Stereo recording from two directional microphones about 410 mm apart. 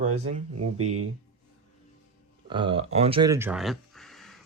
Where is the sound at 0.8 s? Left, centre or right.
Right.